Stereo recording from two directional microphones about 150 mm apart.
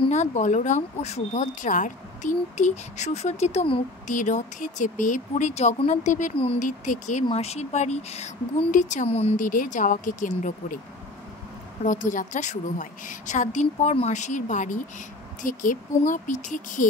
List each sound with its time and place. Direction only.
0.1 s speech: 50° left (ahead or behind)
4.1 s speech: 60° left (ahead or behind)
7.2 s speech: 45° left (ahead or behind)
9.4 s speech: 60° left (ahead or behind)
11.8 s speech: 60° left (ahead or behind)